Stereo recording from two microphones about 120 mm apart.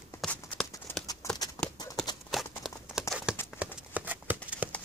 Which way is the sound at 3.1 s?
5° right (ahead or behind).